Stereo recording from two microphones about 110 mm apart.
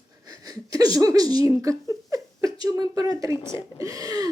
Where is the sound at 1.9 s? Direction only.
30° right (ahead or behind).